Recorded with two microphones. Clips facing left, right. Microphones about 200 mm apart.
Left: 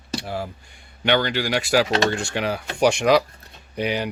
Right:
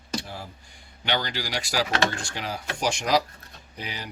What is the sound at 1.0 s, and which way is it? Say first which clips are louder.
Speech: left 8 dB; 60° left (ahead or behind).